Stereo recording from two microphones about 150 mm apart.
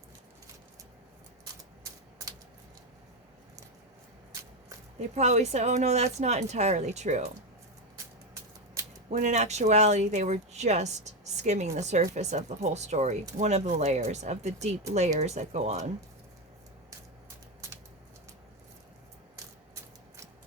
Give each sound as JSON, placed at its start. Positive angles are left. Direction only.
{"t": 4.9, "sound": "speech", "side_deg": -50}
{"t": 9.0, "sound": "speech", "side_deg": -50}